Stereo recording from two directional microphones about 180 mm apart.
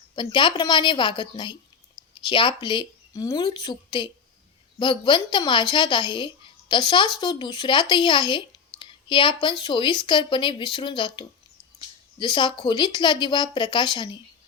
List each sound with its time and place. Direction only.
0.2 s a woman's voice: 25° left (ahead or behind)